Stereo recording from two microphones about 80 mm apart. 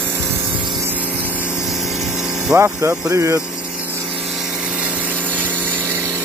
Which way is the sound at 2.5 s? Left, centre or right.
Right.